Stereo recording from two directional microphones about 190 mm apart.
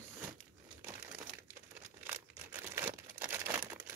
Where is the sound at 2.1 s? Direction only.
15° right (ahead or behind).